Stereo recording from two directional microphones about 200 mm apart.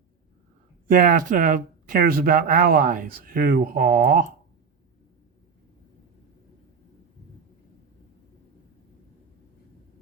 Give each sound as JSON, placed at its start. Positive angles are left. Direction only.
{"t": 0.9, "sound": "speech", "side_deg": -40}